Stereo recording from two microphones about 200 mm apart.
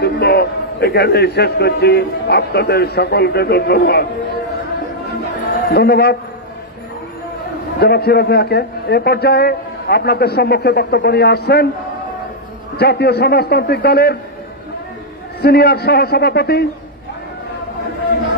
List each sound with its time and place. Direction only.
0.0 s a man's voice: 55° left (ahead or behind)
5.7 s a man's voice: 55° left (ahead or behind)
7.8 s a man's voice: 55° left (ahead or behind)
12.7 s a man's voice: 55° left (ahead or behind)
15.4 s a man's voice: 55° left (ahead or behind)